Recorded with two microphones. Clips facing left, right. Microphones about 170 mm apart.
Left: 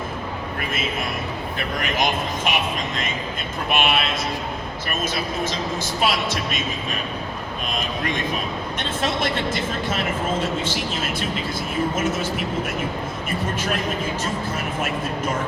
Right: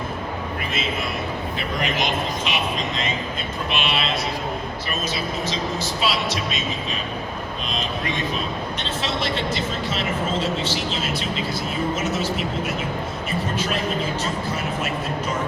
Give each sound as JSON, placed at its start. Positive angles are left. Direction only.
{"t": 2.5, "sound": "speech", "side_deg": 50}
{"t": 3.7, "sound": "speech", "side_deg": 50}
{"t": 6.0, "sound": "speech", "side_deg": 50}
{"t": 9.0, "sound": "speech", "side_deg": 50}